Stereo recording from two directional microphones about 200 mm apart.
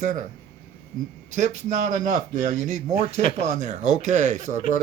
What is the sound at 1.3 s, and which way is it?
Speech, 35° right (ahead or behind).